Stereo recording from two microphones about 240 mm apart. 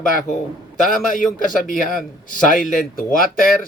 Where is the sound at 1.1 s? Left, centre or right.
Left.